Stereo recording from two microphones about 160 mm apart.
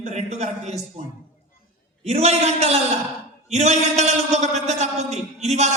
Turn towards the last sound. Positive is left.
turn(degrees=-45)  # may be behind; listen again after turning